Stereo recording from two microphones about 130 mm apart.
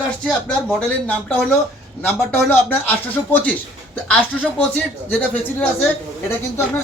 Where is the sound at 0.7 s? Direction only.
10° left (ahead or behind).